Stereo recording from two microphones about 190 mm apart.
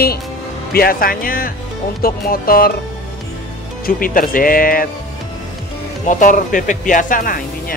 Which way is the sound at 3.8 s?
50° left (ahead or behind).